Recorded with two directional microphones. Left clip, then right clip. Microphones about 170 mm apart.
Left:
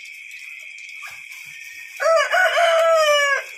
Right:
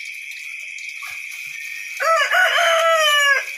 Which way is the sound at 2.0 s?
60° left (ahead or behind).